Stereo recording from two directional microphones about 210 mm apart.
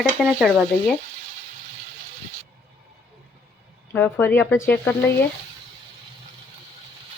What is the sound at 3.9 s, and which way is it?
Speech, 10° left (ahead or behind).